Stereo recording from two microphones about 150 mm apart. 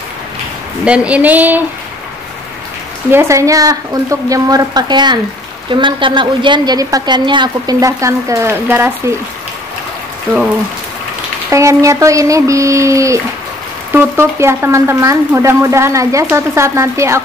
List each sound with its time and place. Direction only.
0.8 s a woman's voice: 10° right (ahead or behind)
3.1 s speech: 15° right (ahead or behind)
11.5 s speech: 20° right (ahead or behind)